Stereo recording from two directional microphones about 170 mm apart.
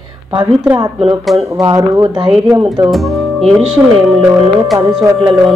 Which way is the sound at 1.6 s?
20° right (ahead or behind).